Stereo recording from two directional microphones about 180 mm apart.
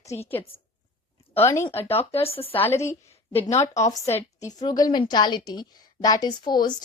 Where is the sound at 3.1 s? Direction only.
35° left (ahead or behind).